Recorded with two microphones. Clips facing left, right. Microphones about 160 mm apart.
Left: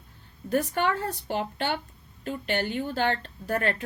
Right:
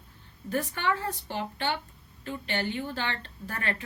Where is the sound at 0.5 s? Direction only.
40° left (ahead or behind).